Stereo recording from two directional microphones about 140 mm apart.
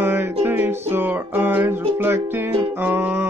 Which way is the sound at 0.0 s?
15° right (ahead or behind).